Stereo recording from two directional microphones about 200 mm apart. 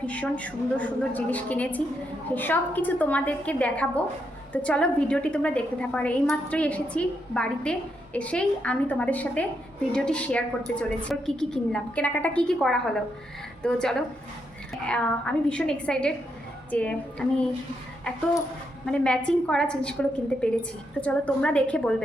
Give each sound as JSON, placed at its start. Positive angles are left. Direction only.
{"t": 0.0, "sound": "a woman's voice", "side_deg": 5}
{"t": 18.9, "sound": "a woman's voice", "side_deg": 5}